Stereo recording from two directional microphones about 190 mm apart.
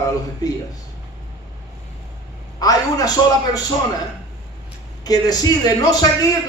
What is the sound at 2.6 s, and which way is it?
Speech, 20° left (ahead or behind).